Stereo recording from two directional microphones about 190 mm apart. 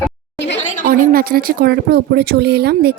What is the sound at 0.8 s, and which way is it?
Speech, 50° right (ahead or behind).